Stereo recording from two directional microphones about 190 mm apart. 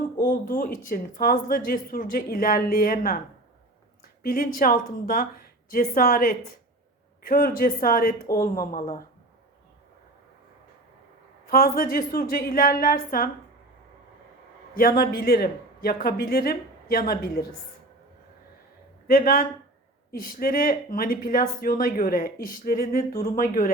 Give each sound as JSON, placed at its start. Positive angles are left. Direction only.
{"t": 0.2, "sound": "a woman's voice", "side_deg": 45}
{"t": 11.4, "sound": "speech", "side_deg": 50}
{"t": 14.8, "sound": "speech", "side_deg": 50}
{"t": 19.0, "sound": "speech", "side_deg": 50}